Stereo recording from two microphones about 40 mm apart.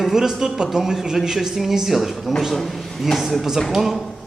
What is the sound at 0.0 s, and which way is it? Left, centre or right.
A man's voice, centre.